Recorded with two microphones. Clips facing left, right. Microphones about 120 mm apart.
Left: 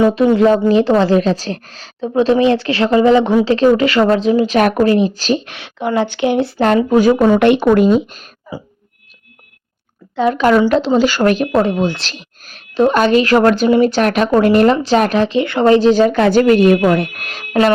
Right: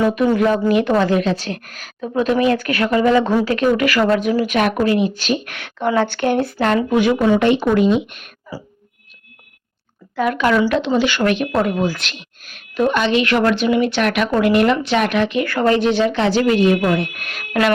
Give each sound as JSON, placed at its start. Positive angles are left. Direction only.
{"t": 0.0, "sound": "a woman's voice", "side_deg": 25}
{"t": 4.5, "sound": "speech", "side_deg": 35}
{"t": 5.5, "sound": "a woman's voice", "side_deg": 20}
{"t": 6.4, "sound": "speech", "side_deg": 30}
{"t": 7.3, "sound": "speech", "side_deg": 60}
{"t": 8.5, "sound": "speech", "side_deg": 20}
{"t": 10.2, "sound": "a woman's voice", "side_deg": 25}
{"t": 17.2, "sound": "speech", "side_deg": 35}